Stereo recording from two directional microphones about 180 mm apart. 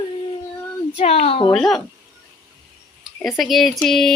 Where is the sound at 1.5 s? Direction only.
5° left (ahead or behind).